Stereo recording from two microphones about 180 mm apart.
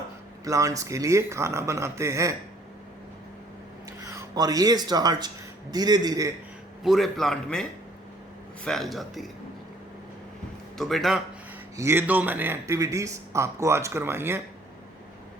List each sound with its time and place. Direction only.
0.4 s speech: 20° right (ahead or behind)
4.1 s a man's voice: 20° right (ahead or behind)
6.8 s a man's voice: centre (ahead or behind)
10.8 s a man's voice: centre (ahead or behind)
11.8 s speech: 15° right (ahead or behind)